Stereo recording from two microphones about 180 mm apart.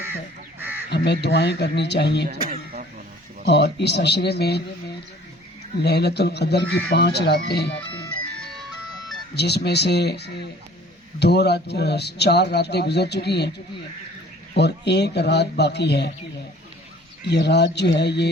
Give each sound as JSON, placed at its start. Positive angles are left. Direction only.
{"t": 0.6, "sound": "crow", "side_deg": -10}
{"t": 0.9, "sound": "a man's voice", "side_deg": 70}
{"t": 2.2, "sound": "a sound", "side_deg": -55}
{"t": 3.4, "sound": "a man's voice", "side_deg": 70}
{"t": 5.8, "sound": "speech", "side_deg": 65}
{"t": 9.3, "sound": "a man's voice", "side_deg": 65}
{"t": 14.5, "sound": "a man's voice", "side_deg": 70}
{"t": 17.2, "sound": "a man's voice", "side_deg": 70}